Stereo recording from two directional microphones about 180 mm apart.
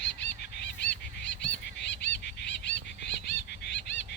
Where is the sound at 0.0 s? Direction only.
70° left (ahead or behind).